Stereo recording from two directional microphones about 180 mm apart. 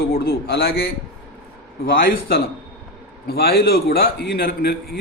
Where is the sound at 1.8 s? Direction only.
55° left (ahead or behind).